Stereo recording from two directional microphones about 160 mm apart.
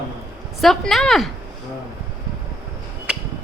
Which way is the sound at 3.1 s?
5° right (ahead or behind).